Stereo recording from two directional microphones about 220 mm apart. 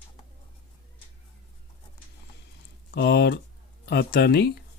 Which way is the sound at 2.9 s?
50° left (ahead or behind).